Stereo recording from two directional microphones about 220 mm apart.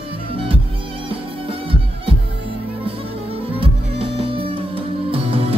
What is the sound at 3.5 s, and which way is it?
Music, 25° right (ahead or behind).